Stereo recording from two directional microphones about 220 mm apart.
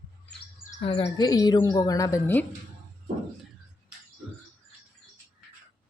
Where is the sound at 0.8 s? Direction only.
25° left (ahead or behind).